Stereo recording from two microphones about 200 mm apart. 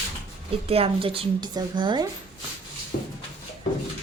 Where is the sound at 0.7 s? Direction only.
30° right (ahead or behind).